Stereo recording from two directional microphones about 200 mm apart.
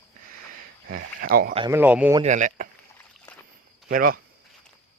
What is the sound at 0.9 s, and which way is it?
Speech, 45° right (ahead or behind).